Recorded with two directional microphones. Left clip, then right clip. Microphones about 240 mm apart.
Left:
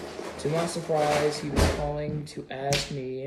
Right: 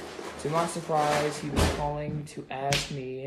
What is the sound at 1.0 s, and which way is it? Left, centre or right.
Speech, centre.